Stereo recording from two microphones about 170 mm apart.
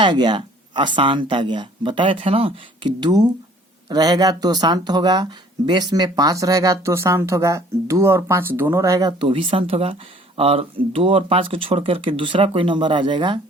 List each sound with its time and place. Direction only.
0.0 s speech: 25° right (ahead or behind)